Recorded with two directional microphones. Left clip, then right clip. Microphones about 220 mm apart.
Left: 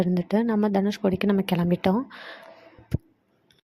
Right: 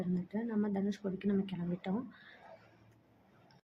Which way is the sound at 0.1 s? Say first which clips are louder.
Left 15 dB; 45° left (ahead or behind).